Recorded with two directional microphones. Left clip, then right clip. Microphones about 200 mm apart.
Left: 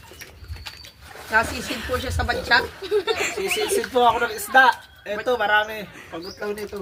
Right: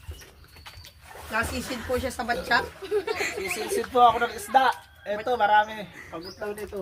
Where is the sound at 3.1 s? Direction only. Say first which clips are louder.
Left 5 dB; 15° left (ahead or behind).